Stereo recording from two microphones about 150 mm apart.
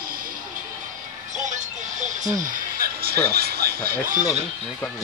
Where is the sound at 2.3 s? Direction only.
60° right (ahead or behind); by 3.9 s 90° right.